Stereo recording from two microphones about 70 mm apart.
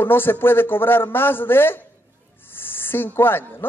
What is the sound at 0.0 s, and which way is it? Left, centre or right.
Speech, left.